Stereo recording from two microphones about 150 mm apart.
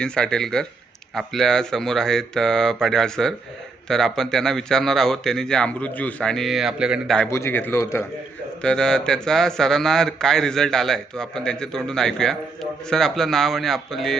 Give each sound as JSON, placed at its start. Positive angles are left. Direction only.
{"t": 0.0, "sound": "speech", "side_deg": 5}
{"t": 7.3, "sound": "a man's voice", "side_deg": 20}
{"t": 8.6, "sound": "speech", "side_deg": 5}